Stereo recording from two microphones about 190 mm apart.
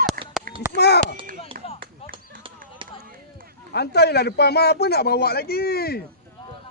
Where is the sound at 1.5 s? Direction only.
50° right (ahead or behind).